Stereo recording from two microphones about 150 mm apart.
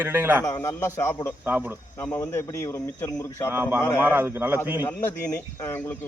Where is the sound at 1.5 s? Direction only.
10° right (ahead or behind).